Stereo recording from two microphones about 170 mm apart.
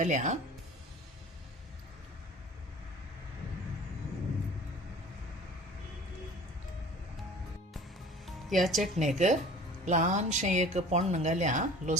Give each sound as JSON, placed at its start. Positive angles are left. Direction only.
{"t": 0.0, "sound": "speech", "side_deg": -45}
{"t": 8.4, "sound": "speech", "side_deg": 0}
{"t": 9.1, "sound": "speech", "side_deg": -45}